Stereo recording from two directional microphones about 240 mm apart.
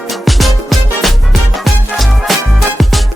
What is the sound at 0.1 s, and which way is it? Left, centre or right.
Music, centre.